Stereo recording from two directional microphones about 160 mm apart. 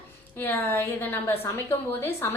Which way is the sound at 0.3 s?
10° left (ahead or behind).